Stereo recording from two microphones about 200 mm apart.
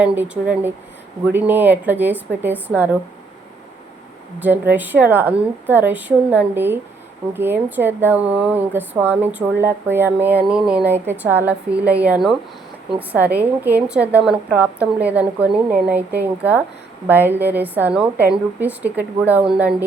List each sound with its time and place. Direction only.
0.0 s speech: 10° right (ahead or behind)
4.4 s speech: 10° right (ahead or behind)